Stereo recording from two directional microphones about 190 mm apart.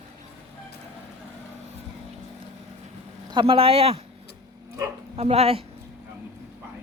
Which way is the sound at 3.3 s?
25° right (ahead or behind).